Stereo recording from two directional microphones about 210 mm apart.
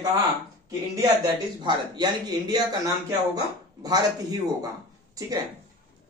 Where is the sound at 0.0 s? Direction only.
20° right (ahead or behind).